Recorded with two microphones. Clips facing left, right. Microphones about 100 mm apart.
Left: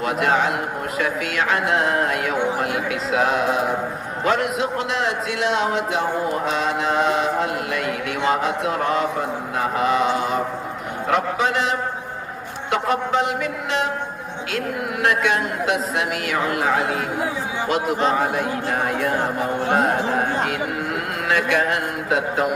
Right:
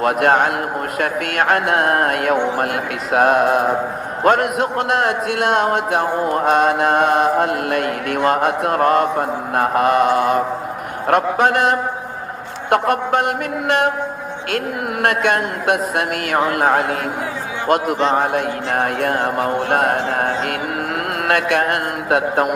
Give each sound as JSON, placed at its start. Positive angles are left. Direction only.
{"t": 0.0, "sound": "a man's voice", "side_deg": -55}
{"t": 15.0, "sound": "a man's voice", "side_deg": -55}